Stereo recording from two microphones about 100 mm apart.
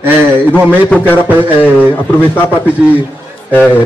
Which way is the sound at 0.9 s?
20° left (ahead or behind).